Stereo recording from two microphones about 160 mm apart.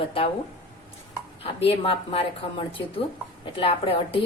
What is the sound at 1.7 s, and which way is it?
Speech, 35° left (ahead or behind).